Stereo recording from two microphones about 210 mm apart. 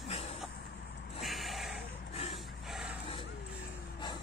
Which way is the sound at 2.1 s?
30° left (ahead or behind).